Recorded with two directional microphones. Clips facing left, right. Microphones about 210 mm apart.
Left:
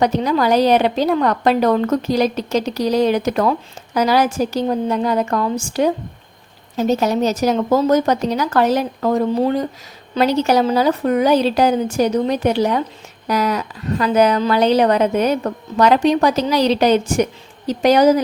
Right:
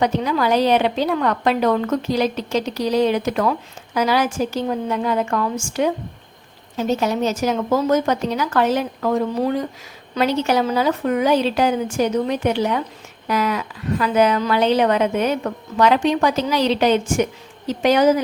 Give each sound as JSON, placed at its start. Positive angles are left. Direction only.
{"t": 0.0, "sound": "a woman's voice", "side_deg": 40}
{"t": 10.2, "sound": "a woman's voice", "side_deg": 40}